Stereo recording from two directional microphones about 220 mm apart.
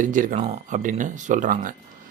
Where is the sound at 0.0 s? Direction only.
35° right (ahead or behind).